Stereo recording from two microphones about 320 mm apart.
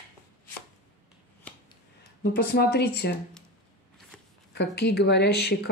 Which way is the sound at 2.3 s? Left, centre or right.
Left.